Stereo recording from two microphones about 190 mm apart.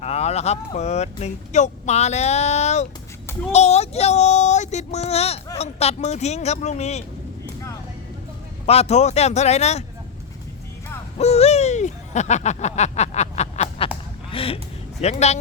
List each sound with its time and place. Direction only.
0.0 s speech: 35° left (ahead or behind)
8.6 s speech: 35° left (ahead or behind)
11.2 s owl: 35° left (ahead or behind)
14.3 s speech: 30° left (ahead or behind)